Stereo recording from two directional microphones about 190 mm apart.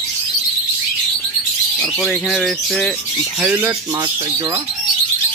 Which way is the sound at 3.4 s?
5° right (ahead or behind).